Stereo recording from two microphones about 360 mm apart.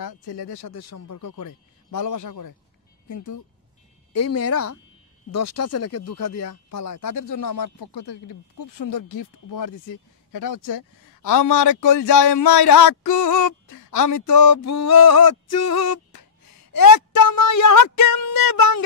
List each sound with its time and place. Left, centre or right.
0.0 s speech: left
0.5 s speech: left
3.1 s speech: left
16.7 s a woman's voice: left